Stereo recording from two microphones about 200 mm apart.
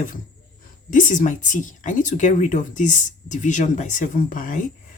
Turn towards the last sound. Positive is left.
turn(degrees=40)  # may be behind; listen again after turning